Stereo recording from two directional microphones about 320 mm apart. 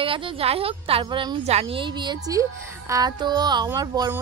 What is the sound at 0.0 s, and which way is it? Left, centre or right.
Speech, centre.